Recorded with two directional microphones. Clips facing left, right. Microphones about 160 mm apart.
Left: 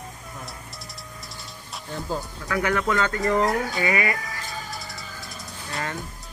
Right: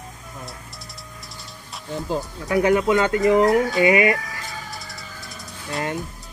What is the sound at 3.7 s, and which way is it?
Speech, 20° right (ahead or behind).